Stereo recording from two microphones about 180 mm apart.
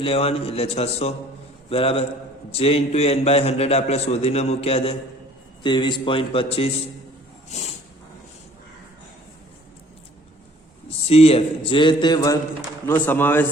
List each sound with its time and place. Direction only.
0.0 s a man's voice: 35° left (ahead or behind)
11.1 s a man's voice: 35° left (ahead or behind); by 13.4 s 10° left (ahead or behind)